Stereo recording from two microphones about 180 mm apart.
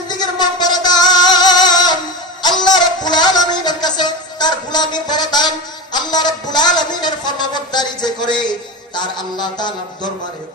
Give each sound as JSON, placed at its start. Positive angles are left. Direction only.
{"t": 0.2, "sound": "music", "side_deg": 25}
{"t": 2.4, "sound": "a sound", "side_deg": 25}
{"t": 5.9, "sound": "a woman's voice", "side_deg": 25}